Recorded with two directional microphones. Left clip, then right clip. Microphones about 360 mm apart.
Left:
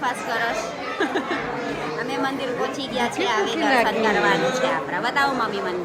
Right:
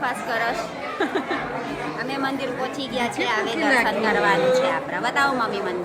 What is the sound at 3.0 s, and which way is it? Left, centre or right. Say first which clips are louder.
A woman's voice: left 1 dB; centre.